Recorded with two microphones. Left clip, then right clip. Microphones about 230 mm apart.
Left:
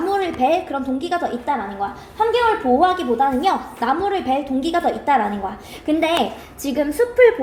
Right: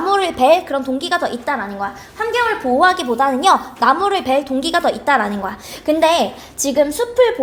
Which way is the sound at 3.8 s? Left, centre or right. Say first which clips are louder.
Right 5 dB; right.